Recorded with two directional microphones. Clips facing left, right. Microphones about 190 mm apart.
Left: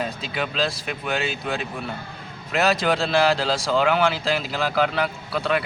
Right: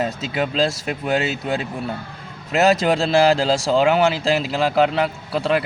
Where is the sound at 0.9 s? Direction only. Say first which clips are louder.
Right 5 dB; 35° right (ahead or behind).